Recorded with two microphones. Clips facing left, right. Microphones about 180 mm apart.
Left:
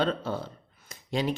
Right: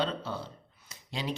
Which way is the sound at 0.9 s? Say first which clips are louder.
Left 7 dB; 50° left (ahead or behind).